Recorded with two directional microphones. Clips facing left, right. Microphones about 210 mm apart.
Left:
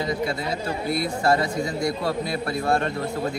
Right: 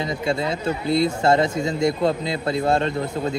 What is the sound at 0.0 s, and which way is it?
Speech, 25° right (ahead or behind).